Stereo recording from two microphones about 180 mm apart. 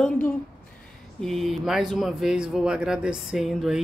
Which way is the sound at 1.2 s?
Centre (ahead or behind).